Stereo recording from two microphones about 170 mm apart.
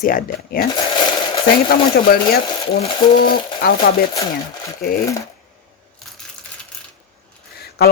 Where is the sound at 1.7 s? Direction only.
65° left (ahead or behind).